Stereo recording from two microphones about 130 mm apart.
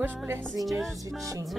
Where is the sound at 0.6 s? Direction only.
Centre (ahead or behind).